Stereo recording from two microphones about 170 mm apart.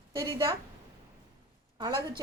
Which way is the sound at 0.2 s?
20° right (ahead or behind).